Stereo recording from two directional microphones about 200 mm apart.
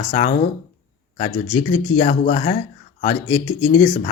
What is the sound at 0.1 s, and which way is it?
Speech, 40° left (ahead or behind).